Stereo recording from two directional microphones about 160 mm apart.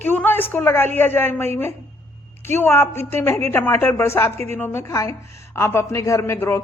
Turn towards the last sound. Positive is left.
turn(degrees=15)  # may be behind; listen again after turning